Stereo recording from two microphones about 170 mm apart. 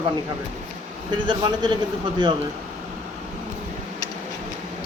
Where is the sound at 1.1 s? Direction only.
30° right (ahead or behind).